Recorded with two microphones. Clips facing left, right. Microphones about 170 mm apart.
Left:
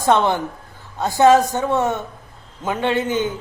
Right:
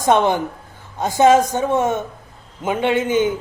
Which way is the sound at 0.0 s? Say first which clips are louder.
Right 1 dB; 20° right (ahead or behind).